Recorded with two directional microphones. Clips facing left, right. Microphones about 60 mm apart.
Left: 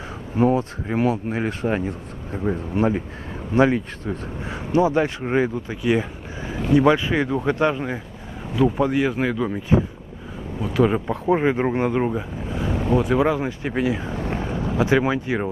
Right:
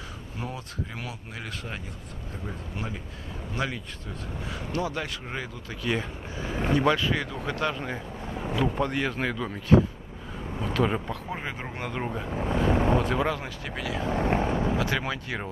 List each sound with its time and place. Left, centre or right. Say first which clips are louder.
0.4 s speech: left 16 dB; left
5.8 s speech: left 7 dB; centre
11.2 s speech: left 15 dB; left; by 12.3 s centre
12.6 s vehicle: right 1 dB; right
12.9 s speech: left 6 dB; centre; by 14.0 s left
14.1 s speech: right 2 dB; right
14.5 s vehicle: even; right
14.8 s speech: left 9 dB; left